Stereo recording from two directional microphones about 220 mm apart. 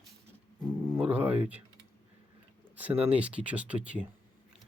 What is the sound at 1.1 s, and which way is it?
Speech, 5° right (ahead or behind).